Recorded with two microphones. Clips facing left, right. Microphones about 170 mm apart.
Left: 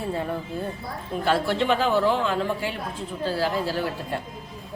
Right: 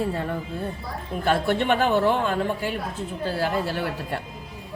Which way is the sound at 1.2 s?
55° right (ahead or behind).